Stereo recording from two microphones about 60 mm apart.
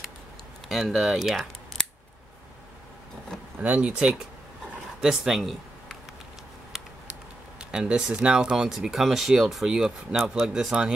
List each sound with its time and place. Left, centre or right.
0.7 s speech: centre
3.3 s vehicle: centre
3.6 s speech: centre
5.0 s speech: centre
6.7 s a sound: centre
7.7 s speech: centre